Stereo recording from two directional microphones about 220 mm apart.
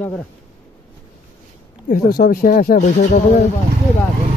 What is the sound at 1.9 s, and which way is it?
A man's voice, 40° left (ahead or behind).